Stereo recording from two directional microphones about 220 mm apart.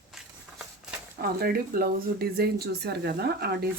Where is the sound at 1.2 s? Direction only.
45° right (ahead or behind).